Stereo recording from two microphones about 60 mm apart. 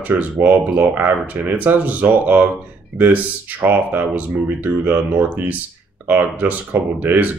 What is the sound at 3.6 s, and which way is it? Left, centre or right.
Speech, right.